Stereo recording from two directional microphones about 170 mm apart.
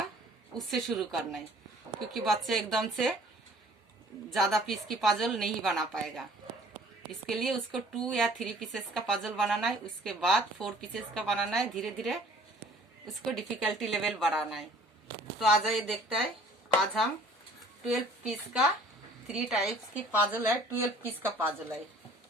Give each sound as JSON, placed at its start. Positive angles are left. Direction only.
{"t": 0.5, "sound": "speech", "side_deg": 0}
{"t": 4.3, "sound": "speech", "side_deg": 0}
{"t": 7.3, "sound": "speech", "side_deg": 0}
{"t": 17.8, "sound": "a woman's voice", "side_deg": 0}